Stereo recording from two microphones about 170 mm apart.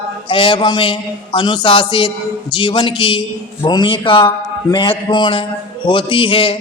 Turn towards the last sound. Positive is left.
turn(degrees=30)  # may be behind; listen again after turning